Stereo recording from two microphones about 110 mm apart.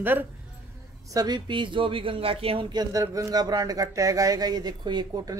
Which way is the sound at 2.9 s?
30° right (ahead or behind).